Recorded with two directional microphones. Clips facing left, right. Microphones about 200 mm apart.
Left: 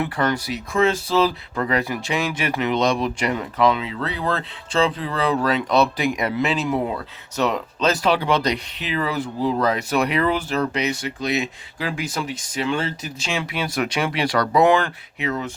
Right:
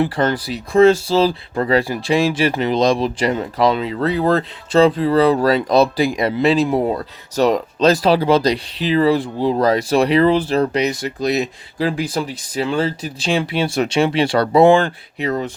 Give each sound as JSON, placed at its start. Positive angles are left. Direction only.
{"t": 0.0, "sound": "speech", "side_deg": -30}